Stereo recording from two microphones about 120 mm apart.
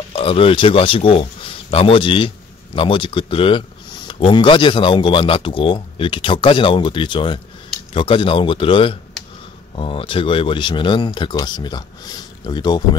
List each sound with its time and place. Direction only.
0.1 s a man's voice: 50° left (ahead or behind)